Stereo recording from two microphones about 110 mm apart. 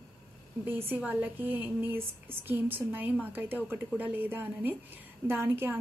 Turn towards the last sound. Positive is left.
turn(degrees=-20)  # may be behind; listen again after turning